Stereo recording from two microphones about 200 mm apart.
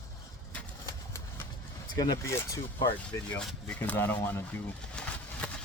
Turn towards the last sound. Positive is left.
turn(degrees=5)  # may be behind; listen again after turning